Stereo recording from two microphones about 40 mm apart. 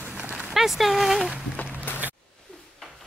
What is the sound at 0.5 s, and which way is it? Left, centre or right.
Speech, centre.